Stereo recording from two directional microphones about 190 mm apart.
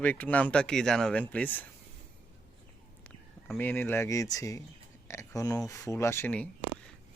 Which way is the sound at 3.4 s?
10° left (ahead or behind).